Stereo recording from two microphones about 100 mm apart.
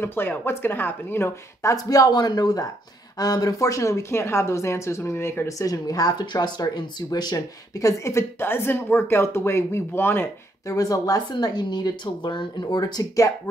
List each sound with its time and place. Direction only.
0.0 s speech: 20° left (ahead or behind)
10.7 s speech: 35° left (ahead or behind)